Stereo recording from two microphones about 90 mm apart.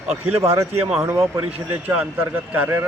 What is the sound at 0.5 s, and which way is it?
Speech, 30° right (ahead or behind).